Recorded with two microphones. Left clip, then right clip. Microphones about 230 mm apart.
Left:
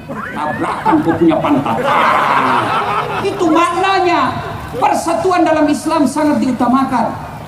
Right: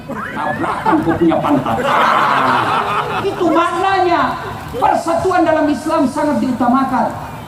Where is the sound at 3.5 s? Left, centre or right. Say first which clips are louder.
Left 2 dB; left.